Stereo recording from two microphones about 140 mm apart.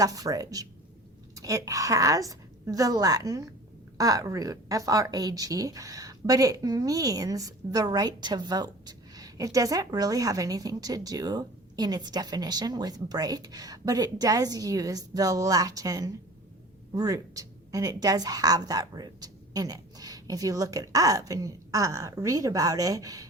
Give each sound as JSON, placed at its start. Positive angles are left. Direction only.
{"t": 0.0, "sound": "a woman's voice", "side_deg": -25}